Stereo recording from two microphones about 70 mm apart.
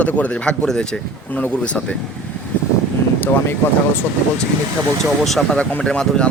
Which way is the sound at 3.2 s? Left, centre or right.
Left.